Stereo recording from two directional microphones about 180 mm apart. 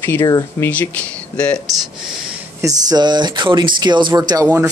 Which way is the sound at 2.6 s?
20° right (ahead or behind).